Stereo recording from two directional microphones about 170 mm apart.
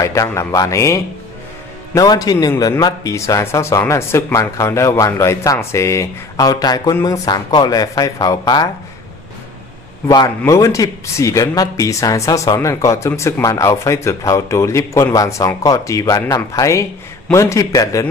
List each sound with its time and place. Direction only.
0.0 s a man's voice: 20° left (ahead or behind)
10.0 s a man's voice: 20° left (ahead or behind)